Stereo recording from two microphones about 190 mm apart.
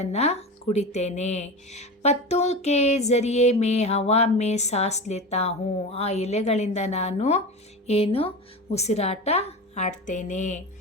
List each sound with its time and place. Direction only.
0.0 s speech: 35° left (ahead or behind)